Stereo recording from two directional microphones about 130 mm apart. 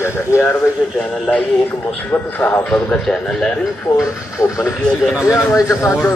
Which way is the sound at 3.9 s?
25° left (ahead or behind).